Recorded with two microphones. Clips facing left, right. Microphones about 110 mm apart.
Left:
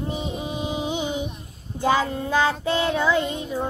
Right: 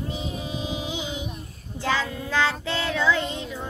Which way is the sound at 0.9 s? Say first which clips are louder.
Left 5 dB; 55° left (ahead or behind).